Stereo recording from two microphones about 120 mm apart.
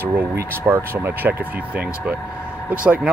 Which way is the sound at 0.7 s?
20° right (ahead or behind).